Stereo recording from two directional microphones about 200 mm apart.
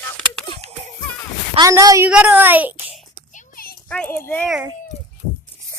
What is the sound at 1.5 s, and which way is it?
A child's voice, 15° right (ahead or behind).